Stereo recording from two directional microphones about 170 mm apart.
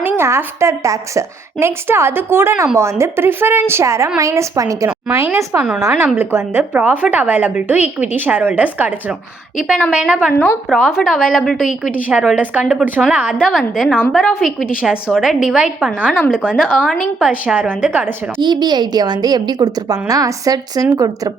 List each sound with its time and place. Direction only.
0.0 s a woman's voice: 15° right (ahead or behind)
10.3 s a woman's voice: 15° left (ahead or behind)
10.7 s a woman's voice: centre (ahead or behind)
18.3 s a woman's voice: 25° right (ahead or behind)